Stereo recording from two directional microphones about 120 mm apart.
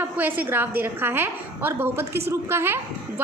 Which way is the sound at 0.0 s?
15° right (ahead or behind).